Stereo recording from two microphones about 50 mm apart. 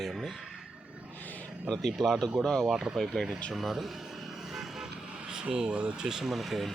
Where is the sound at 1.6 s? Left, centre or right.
Centre.